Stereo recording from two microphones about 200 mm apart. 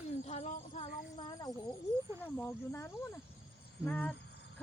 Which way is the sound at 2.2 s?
10° left (ahead or behind).